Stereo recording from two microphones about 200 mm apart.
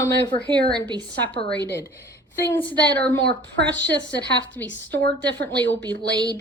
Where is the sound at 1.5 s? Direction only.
10° left (ahead or behind).